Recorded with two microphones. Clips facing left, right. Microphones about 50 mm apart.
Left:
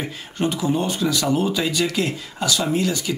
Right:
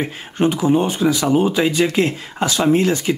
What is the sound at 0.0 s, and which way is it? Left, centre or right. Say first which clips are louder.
Speech: right 6 dB; right.